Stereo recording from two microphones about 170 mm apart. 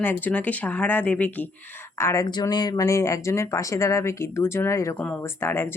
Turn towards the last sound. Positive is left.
turn(degrees=15)  # may be behind; listen again after turning